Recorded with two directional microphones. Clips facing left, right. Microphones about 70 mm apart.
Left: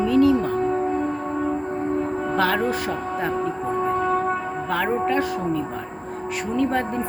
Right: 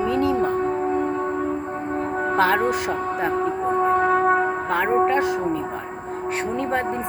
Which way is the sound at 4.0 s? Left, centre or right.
Right.